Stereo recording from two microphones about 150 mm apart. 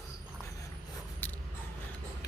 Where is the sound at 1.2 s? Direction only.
10° left (ahead or behind).